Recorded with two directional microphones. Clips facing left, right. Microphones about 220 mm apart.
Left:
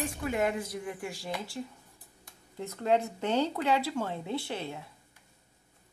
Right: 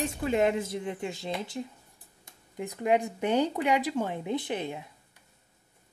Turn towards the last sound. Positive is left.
turn(degrees=-15)  # may be behind; listen again after turning